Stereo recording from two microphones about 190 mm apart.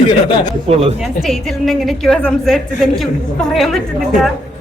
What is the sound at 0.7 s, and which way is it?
Speech, 30° right (ahead or behind).